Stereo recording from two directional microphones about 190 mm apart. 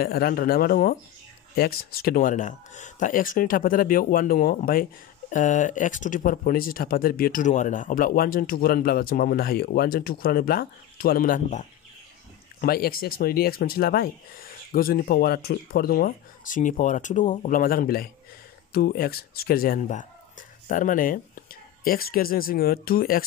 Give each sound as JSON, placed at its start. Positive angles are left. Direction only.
{"t": 0.0, "sound": "speech", "side_deg": 50}